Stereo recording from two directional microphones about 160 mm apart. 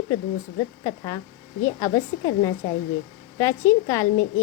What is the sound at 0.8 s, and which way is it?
A woman's voice, 20° left (ahead or behind).